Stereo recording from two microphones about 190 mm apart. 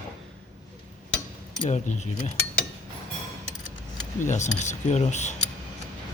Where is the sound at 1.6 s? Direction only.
40° left (ahead or behind).